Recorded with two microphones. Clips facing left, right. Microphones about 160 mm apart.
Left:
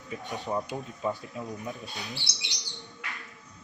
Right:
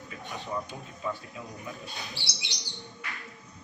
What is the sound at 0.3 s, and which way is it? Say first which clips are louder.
Speech: left 4 dB; 40° left (ahead or behind).